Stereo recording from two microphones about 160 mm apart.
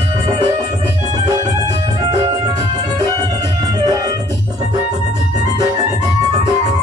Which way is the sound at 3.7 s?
25° right (ahead or behind).